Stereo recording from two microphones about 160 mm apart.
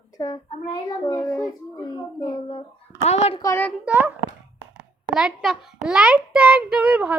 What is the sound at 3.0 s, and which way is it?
Speech, 40° left (ahead or behind).